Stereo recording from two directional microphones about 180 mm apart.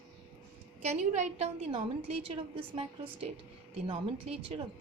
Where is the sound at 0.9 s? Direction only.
40° right (ahead or behind).